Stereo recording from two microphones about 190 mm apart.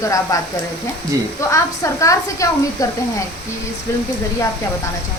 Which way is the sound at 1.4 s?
15° left (ahead or behind).